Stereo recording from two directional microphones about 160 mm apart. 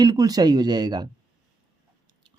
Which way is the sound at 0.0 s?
25° right (ahead or behind).